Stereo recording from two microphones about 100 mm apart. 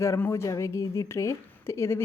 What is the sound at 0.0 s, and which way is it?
Speech, 25° left (ahead or behind).